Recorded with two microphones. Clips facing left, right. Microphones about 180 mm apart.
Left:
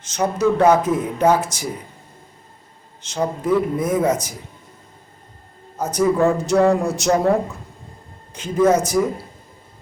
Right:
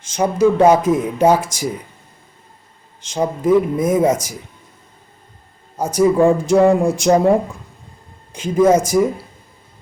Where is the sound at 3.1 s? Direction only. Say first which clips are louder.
Right 4 dB; 10° right (ahead or behind).